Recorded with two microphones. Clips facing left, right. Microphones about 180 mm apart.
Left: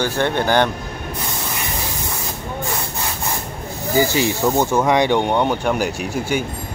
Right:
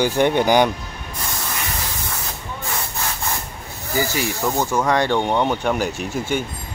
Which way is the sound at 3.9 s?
20° left (ahead or behind).